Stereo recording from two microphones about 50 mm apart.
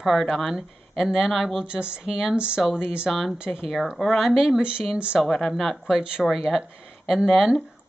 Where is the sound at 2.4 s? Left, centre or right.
Centre.